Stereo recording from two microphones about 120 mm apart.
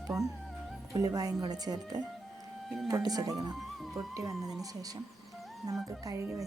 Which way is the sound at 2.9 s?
30° right (ahead or behind).